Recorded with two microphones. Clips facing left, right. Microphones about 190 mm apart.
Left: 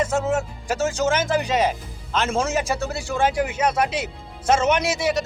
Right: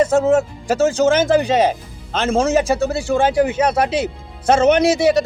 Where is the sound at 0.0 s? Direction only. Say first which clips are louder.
Right 8 dB; 35° right (ahead or behind).